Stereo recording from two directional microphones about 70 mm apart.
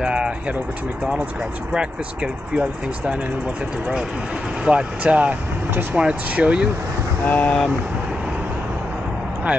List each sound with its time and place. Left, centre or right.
0.0 s speech: centre
4.6 s speech: centre
7.2 s speech: left